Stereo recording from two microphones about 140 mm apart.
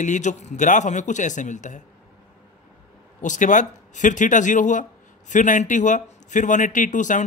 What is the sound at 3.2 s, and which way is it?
Speech, 65° left (ahead or behind).